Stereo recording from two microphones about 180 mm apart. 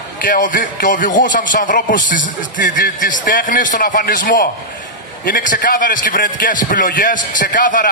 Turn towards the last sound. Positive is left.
turn(degrees=45)  # may be behind; listen again after turning